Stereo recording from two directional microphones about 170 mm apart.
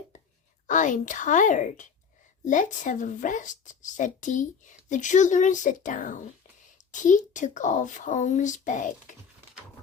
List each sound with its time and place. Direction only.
0.7 s speech: 50° left (ahead or behind)